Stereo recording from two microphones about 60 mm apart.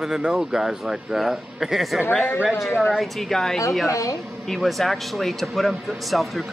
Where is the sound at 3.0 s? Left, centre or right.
Centre.